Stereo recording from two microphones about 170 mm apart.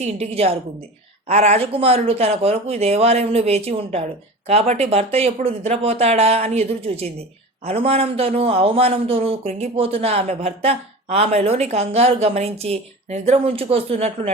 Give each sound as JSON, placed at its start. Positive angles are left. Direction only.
{"t": 0.0, "sound": "a man's voice", "side_deg": -35}